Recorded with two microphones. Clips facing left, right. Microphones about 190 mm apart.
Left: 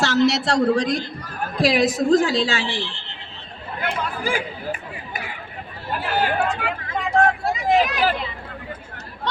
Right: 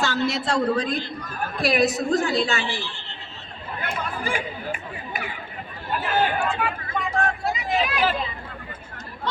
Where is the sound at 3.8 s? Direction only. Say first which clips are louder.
Left 4 dB; 80° left.